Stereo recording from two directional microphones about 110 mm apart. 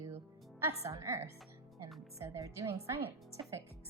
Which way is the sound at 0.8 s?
25° right (ahead or behind).